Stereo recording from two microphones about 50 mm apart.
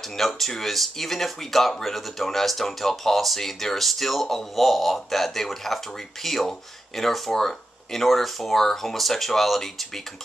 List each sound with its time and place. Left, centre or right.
0.2 s speech: centre